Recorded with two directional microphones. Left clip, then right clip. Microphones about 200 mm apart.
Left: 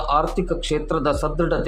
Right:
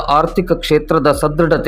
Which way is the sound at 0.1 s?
25° right (ahead or behind).